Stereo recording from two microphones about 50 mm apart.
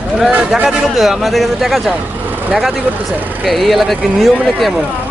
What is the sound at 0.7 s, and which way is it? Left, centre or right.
Speech, centre.